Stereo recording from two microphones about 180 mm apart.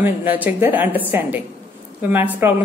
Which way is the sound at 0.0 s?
10° right (ahead or behind).